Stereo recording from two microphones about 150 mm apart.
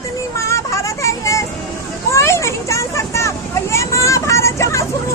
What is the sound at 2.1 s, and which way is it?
Vehicle, 20° left (ahead or behind).